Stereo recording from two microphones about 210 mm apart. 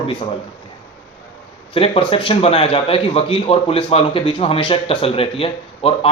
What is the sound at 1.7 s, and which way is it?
A man's voice, 25° left (ahead or behind).